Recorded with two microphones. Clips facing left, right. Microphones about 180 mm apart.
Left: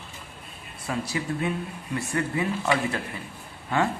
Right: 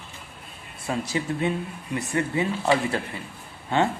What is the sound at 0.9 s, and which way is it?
A man's voice, 25° right (ahead or behind).